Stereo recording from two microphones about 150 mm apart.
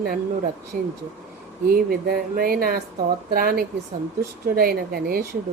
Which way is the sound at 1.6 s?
85° right.